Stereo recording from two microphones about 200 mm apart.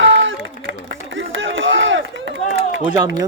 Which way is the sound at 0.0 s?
70° right (ahead or behind).